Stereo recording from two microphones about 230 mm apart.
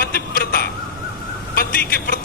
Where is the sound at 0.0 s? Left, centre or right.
Left.